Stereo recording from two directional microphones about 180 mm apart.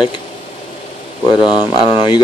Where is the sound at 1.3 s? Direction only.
25° left (ahead or behind).